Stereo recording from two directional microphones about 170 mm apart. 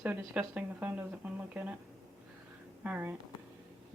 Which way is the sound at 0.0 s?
10° right (ahead or behind).